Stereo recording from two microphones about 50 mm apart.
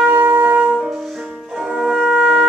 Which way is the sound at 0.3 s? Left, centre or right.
Right.